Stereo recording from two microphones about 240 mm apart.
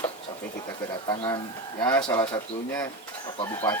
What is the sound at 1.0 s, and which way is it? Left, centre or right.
Speech, centre.